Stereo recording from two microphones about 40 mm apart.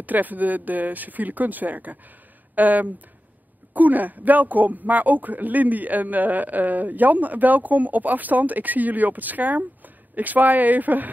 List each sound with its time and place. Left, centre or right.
0.0 s speech: right